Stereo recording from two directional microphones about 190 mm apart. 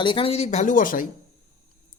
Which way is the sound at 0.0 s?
25° left (ahead or behind).